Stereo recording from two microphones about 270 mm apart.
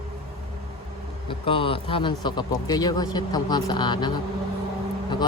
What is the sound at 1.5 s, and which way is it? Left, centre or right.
Speech, centre.